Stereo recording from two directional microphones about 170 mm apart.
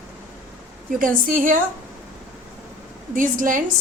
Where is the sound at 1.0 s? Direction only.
55° right (ahead or behind).